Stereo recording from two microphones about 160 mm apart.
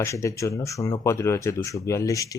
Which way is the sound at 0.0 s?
20° left (ahead or behind).